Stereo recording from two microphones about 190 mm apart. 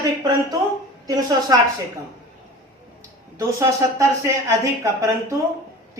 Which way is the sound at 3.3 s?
15° right (ahead or behind).